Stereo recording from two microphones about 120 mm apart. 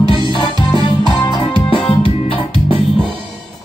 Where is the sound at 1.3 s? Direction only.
45° left (ahead or behind).